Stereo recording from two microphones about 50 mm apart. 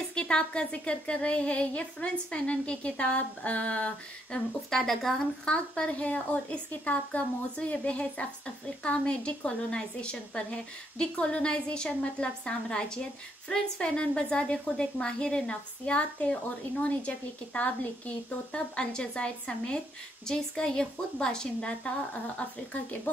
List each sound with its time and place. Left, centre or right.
0.1 s speech: centre
4.6 s a woman's voice: centre
5.4 s a woman's voice: centre